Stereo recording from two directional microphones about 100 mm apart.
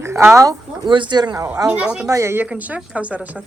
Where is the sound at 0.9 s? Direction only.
50° right (ahead or behind).